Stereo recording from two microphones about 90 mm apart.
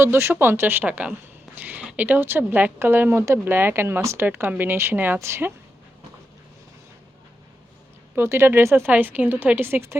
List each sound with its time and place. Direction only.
0.0 s speech: 30° right (ahead or behind)
8.1 s speech: 25° right (ahead or behind)